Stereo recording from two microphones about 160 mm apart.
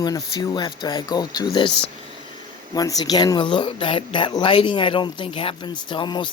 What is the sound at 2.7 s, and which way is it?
Speech, 25° left (ahead or behind).